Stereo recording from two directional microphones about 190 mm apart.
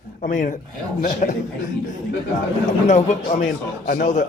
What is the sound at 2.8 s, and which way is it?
A man's voice, 40° left (ahead or behind).